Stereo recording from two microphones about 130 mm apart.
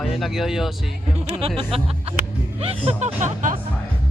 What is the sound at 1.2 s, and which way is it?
Speech, 50° right (ahead or behind).